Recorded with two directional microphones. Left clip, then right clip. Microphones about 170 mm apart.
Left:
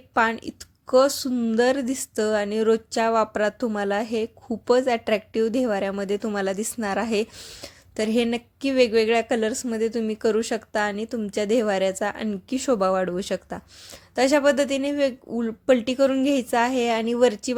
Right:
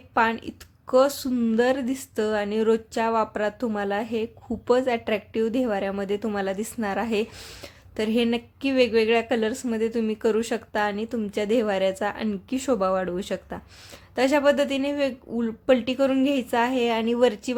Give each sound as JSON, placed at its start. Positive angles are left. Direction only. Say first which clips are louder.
{"t": 0.1, "sound": "a woman's voice", "louder": "left 1 dB", "side_deg": 25}